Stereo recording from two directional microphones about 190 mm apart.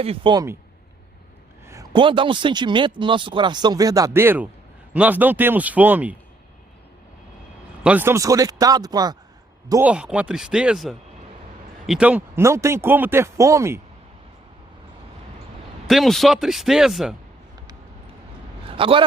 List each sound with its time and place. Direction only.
0.0 s speech: 30° right (ahead or behind)
1.6 s speech: 15° right (ahead or behind)
7.9 s speech: 10° right (ahead or behind)
9.9 s speech: 5° right (ahead or behind)
15.9 s speech: centre (ahead or behind)
18.8 s speech: 30° right (ahead or behind)